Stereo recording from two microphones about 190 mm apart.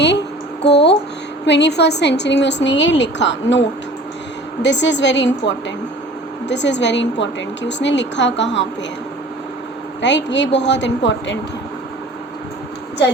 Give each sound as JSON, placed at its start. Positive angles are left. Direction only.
{"t": 0.7, "sound": "a woman's voice", "side_deg": 65}
{"t": 4.6, "sound": "a woman's voice", "side_deg": 70}
{"t": 10.0, "sound": "a woman's voice", "side_deg": 70}